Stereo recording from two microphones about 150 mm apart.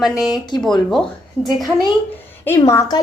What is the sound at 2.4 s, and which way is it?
Speech, 15° left (ahead or behind).